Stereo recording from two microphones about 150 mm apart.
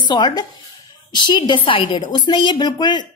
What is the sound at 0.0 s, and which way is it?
A woman's voice, 30° left (ahead or behind).